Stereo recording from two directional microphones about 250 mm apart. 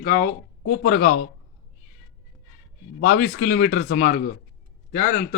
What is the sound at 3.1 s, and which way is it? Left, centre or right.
Speech, left.